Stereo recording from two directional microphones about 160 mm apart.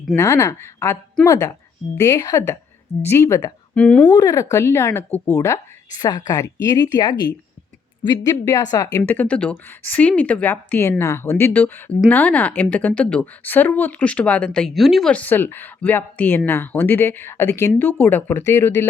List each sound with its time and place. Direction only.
0.2 s a woman's voice: 20° left (ahead or behind)
3.8 s speech: 5° left (ahead or behind)
4.1 s a woman's voice: 20° left (ahead or behind)